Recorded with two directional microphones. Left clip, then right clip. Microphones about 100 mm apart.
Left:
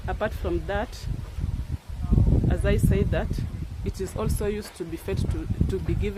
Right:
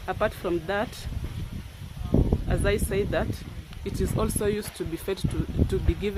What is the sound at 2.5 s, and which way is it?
Speech, 45° right (ahead or behind).